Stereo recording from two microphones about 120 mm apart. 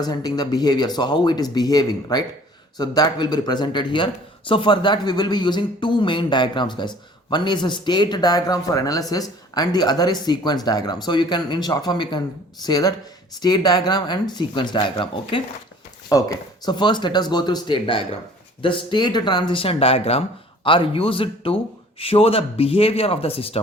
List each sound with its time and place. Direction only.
0.0 s speech: 35° left (ahead or behind)
16.6 s a man's voice: 40° left (ahead or behind)